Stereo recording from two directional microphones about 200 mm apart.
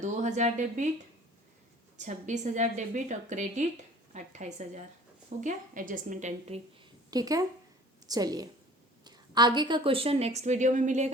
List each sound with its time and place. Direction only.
0.0 s a woman's voice: 35° right (ahead or behind)
2.0 s a woman's voice: 35° right (ahead or behind)
7.1 s a woman's voice: 20° right (ahead or behind); by 11.1 s 35° right (ahead or behind)